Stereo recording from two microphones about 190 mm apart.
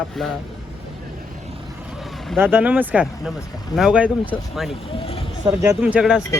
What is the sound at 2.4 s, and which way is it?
Speech, 10° right (ahead or behind).